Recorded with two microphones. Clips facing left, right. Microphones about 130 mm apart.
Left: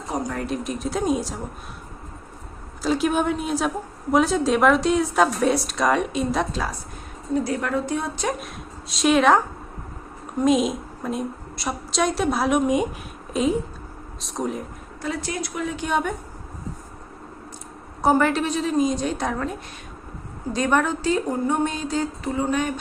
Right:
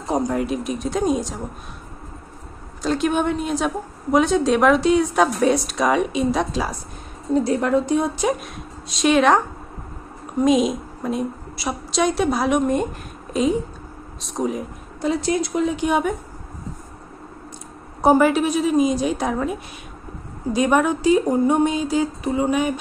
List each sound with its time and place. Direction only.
0.1 s a sound: 15° right (ahead or behind)
0.5 s a woman's voice: centre (ahead or behind)
2.8 s a woman's voice: 5° left (ahead or behind)
7.3 s a woman's voice: 25° right (ahead or behind)
8.3 s a woman's voice: centre (ahead or behind)
15.0 s a woman's voice: 25° right (ahead or behind)
18.0 s a woman's voice: 10° right (ahead or behind)